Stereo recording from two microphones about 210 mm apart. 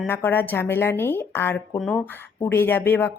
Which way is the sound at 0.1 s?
10° left (ahead or behind).